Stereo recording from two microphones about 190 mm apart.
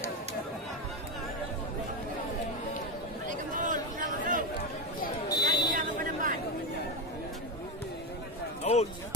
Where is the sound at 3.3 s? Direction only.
45° right (ahead or behind).